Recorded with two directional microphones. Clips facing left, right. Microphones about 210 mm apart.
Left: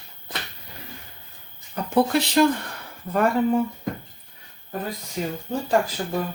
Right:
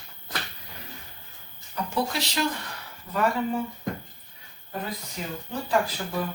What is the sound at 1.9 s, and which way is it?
Speech, 55° left (ahead or behind).